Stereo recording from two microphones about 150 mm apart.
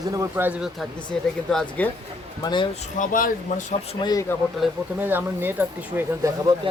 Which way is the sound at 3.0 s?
60° left (ahead or behind).